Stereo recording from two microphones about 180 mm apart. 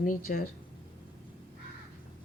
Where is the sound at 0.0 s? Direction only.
50° left (ahead or behind).